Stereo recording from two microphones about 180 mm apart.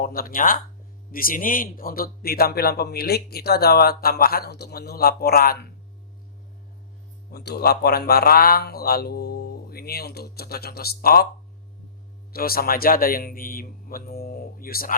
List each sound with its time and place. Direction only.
0.0 s a man's voice: 55° left (ahead or behind)
7.3 s a man's voice: 60° left (ahead or behind)
12.3 s a man's voice: 55° left (ahead or behind)